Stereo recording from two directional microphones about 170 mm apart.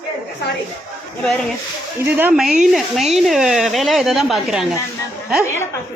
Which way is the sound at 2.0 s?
10° right (ahead or behind).